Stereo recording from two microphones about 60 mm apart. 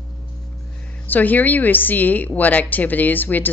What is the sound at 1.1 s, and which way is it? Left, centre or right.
A woman's voice, left.